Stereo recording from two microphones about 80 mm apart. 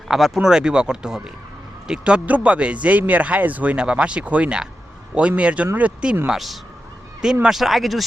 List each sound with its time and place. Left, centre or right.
0.1 s speech: centre
6.2 s speech: centre